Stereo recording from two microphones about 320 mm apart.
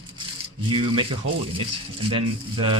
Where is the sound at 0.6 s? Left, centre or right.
Centre.